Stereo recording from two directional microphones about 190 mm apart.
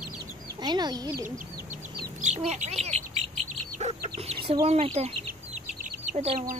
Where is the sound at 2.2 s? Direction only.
40° right (ahead or behind).